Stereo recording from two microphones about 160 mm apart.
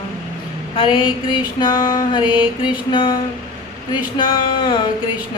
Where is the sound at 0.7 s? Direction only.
35° left (ahead or behind).